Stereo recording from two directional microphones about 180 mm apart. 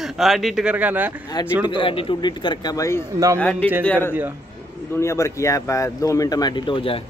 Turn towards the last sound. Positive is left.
turn(degrees=30)  # may be behind; listen again after turning